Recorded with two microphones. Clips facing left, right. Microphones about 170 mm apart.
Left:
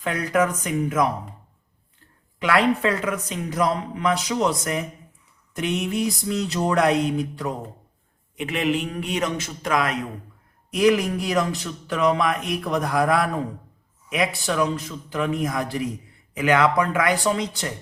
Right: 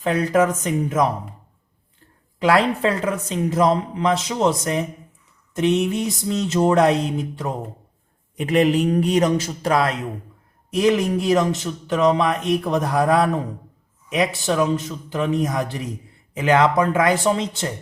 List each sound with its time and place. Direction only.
0.0 s speech: 30° right (ahead or behind)
2.4 s speech: 30° right (ahead or behind)
8.4 s a man's voice: 40° right (ahead or behind)
14.4 s speech: 25° right (ahead or behind)